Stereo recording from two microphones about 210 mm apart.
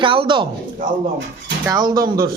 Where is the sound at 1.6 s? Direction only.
20° right (ahead or behind).